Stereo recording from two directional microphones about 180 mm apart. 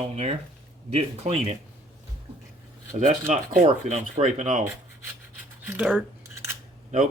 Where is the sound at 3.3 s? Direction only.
40° right (ahead or behind).